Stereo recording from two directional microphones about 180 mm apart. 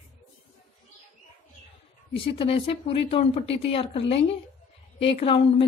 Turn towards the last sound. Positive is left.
turn(degrees=35)  # may be behind; listen again after turning